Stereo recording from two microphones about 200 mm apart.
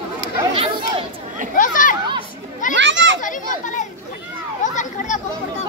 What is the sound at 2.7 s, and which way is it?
Children playing, 65° right (ahead or behind).